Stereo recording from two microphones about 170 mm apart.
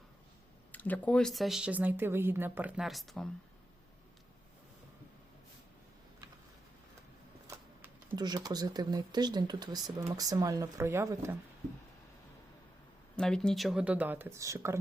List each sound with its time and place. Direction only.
0.7 s speech: 10° left (ahead or behind)
7.4 s speech: 20° right (ahead or behind)
13.1 s speech: 5° left (ahead or behind); by 14.8 s 15° right (ahead or behind)